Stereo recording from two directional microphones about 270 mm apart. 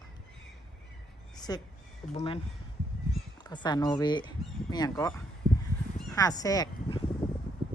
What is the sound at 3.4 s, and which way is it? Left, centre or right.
Speech, centre.